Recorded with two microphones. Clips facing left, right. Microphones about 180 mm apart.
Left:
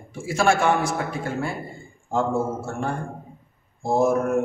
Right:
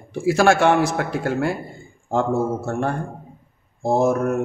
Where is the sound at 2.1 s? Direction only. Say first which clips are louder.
Right 3 dB; 65° right (ahead or behind).